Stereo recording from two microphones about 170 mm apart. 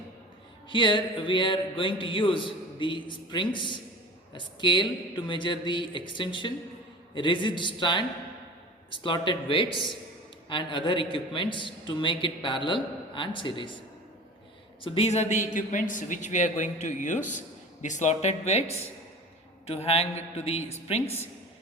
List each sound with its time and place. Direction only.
0.7 s a man's voice: 30° left (ahead or behind)
14.8 s speech: 35° left (ahead or behind)